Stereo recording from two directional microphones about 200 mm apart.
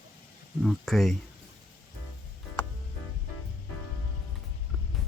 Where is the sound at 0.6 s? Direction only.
Centre (ahead or behind).